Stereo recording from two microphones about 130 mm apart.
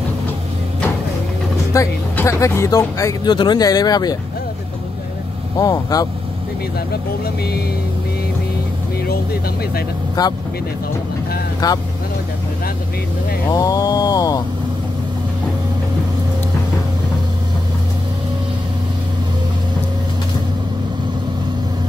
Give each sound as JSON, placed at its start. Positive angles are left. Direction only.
{"t": 1.7, "sound": "speech", "side_deg": 25}
{"t": 5.6, "sound": "speech", "side_deg": 30}
{"t": 10.2, "sound": "speech", "side_deg": 30}
{"t": 11.6, "sound": "speech", "side_deg": 30}
{"t": 13.5, "sound": "speech", "side_deg": 30}